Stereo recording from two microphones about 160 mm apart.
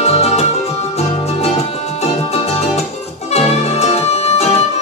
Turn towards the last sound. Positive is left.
turn(degrees=40)  # may be behind; listen again after turning